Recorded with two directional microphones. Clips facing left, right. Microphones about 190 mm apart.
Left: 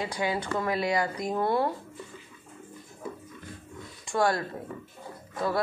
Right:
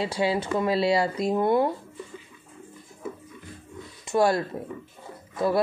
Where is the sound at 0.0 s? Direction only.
25° right (ahead or behind).